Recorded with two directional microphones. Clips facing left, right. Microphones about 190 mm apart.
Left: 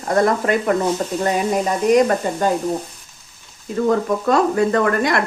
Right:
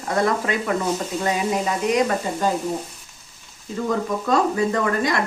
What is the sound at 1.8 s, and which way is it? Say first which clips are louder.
Sizzle: left 7 dB; 45° left (ahead or behind).